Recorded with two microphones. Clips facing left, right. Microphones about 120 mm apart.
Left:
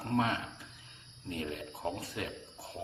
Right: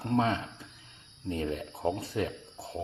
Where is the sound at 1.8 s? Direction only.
30° right (ahead or behind).